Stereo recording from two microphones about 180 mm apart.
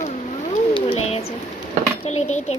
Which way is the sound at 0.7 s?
35° left (ahead or behind).